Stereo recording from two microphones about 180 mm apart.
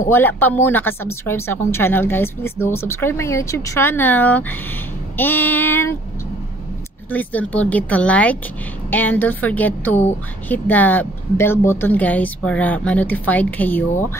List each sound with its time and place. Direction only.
0.1 s speech: 10° left (ahead or behind)
7.1 s speech: 10° left (ahead or behind)